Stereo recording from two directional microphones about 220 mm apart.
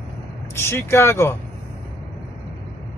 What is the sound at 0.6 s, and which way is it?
Speech, 10° left (ahead or behind).